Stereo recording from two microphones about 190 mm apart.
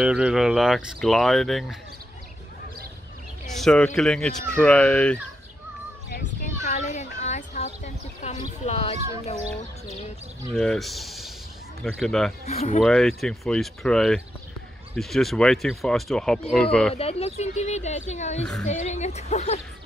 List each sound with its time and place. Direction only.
0.0 s speech: 5° right (ahead or behind)
3.5 s speech: 5° left (ahead or behind)
6.6 s a sound: 40° left (ahead or behind)
8.6 s speech: 30° left (ahead or behind)
10.5 s speech: 5° left (ahead or behind)
12.4 s speech: 35° left (ahead or behind)
12.8 s speech: centre (ahead or behind)
16.9 s speech: 30° left (ahead or behind)
18.4 s speech: 5° left (ahead or behind)
18.7 s speech: 35° left (ahead or behind)